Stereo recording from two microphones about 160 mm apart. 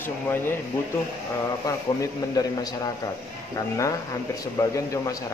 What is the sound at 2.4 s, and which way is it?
Speech, 25° left (ahead or behind).